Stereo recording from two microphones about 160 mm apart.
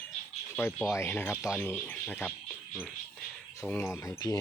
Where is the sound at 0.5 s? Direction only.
10° left (ahead or behind).